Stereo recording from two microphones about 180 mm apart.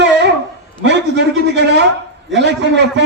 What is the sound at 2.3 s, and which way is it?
Speech, 75° right (ahead or behind).